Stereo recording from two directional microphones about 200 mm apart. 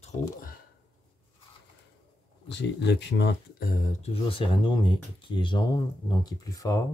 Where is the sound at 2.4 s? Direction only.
60° left (ahead or behind).